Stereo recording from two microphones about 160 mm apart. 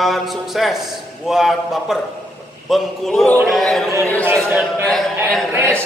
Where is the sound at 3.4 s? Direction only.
Centre (ahead or behind).